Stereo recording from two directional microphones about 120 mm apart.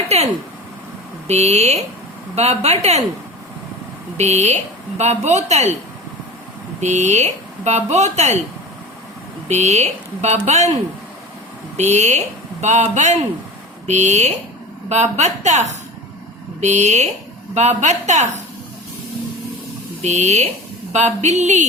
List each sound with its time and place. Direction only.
0.1 s speech: 60° right (ahead or behind)
1.3 s speech: 65° right (ahead or behind)
4.2 s speech: 65° right (ahead or behind)
6.7 s speech: 75° right (ahead or behind)
9.5 s speech: 70° right (ahead or behind)
11.8 s speech: 70° right (ahead or behind)
20.0 s speech: 70° right (ahead or behind)